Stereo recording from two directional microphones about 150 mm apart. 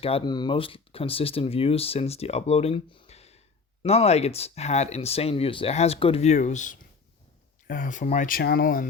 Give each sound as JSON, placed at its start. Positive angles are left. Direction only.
{"t": 0.0, "sound": "speech", "side_deg": 35}